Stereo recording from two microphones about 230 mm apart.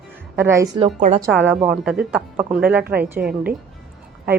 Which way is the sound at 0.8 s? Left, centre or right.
Right.